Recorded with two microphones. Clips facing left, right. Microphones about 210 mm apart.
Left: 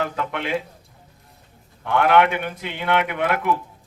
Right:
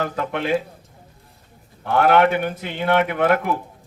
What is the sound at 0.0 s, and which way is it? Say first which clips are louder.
Speech: right 2 dB; 40° right (ahead or behind).